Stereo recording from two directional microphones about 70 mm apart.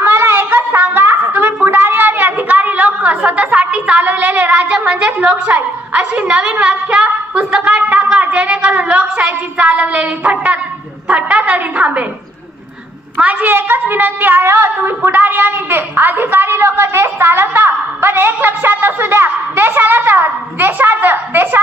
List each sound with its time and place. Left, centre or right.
0.0 s a sound: right
4.8 s a woman's voice: centre
13.2 s a woman's voice: right